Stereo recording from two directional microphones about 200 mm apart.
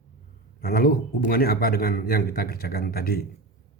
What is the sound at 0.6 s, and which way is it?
Speech, 50° left (ahead or behind).